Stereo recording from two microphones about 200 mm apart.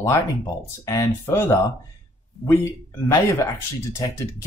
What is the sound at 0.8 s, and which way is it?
Speech, 15° left (ahead or behind).